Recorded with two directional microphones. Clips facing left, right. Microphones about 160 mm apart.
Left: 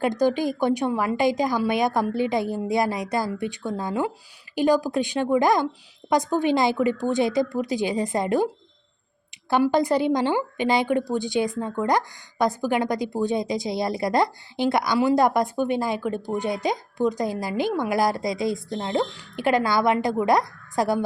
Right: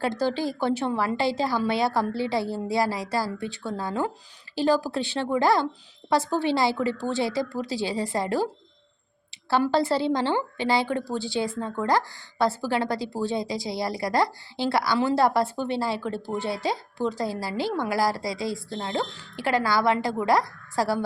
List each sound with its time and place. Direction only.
0.0 s a woman's voice: 15° left (ahead or behind)